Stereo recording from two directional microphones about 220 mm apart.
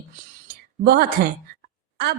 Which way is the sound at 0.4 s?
45° right (ahead or behind).